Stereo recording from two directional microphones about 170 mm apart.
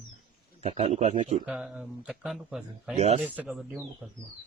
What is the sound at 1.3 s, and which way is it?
Speech, 5° right (ahead or behind).